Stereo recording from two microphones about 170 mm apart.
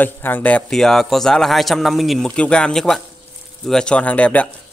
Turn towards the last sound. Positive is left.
turn(degrees=10)  # may be behind; listen again after turning